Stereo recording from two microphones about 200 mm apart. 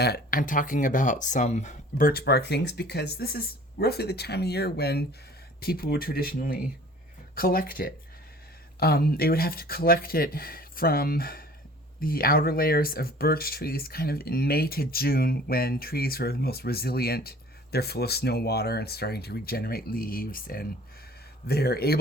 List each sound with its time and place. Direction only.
0.0 s speech: 50° left (ahead or behind)